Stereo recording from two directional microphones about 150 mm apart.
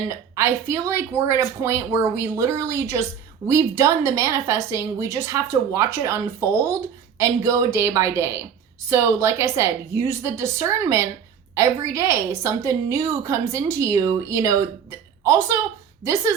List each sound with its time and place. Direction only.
0.1 s a woman's voice: 20° right (ahead or behind)